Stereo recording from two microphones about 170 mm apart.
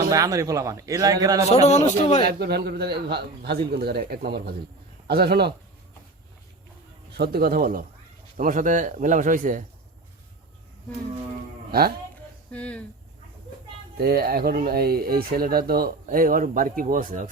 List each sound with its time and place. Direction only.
0.1 s speech: 20° right (ahead or behind)
1.5 s a man's voice: 40° left (ahead or behind)
2.2 s a man's voice: 65° right (ahead or behind)
7.1 s a man's voice: 65° right (ahead or behind)
11.7 s speech: 65° right (ahead or behind)
12.5 s speech: 5° left (ahead or behind)
13.9 s speech: 65° right (ahead or behind)